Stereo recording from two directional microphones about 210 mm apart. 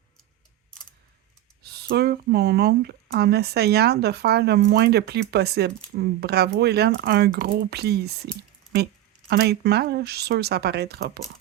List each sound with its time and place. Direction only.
1.6 s speech: 50° right (ahead or behind)
9.3 s speech: 50° right (ahead or behind)